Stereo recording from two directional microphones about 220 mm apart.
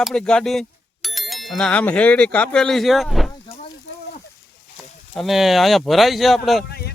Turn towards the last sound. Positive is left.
turn(degrees=45)  # may be behind; listen again after turning